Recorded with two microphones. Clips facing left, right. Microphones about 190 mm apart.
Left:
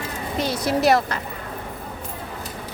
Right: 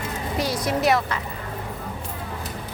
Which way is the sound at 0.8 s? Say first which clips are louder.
Left 3 dB; 35° left (ahead or behind).